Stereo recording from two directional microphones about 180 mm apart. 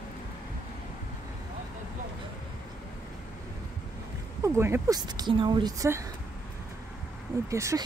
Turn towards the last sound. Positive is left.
turn(degrees=-15)  # may be behind; listen again after turning